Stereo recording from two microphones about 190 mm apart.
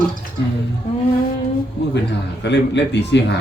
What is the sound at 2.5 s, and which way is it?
Speech, 65° left (ahead or behind).